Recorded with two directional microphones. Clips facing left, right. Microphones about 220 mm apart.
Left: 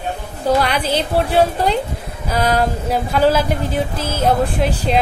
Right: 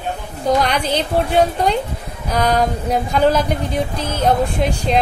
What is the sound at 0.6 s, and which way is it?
A woman's voice, 5° left (ahead or behind).